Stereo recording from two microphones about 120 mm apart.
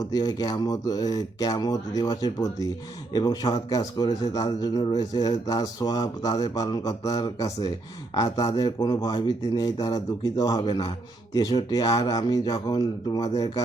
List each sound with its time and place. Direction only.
0.0 s speech: 35° left (ahead or behind)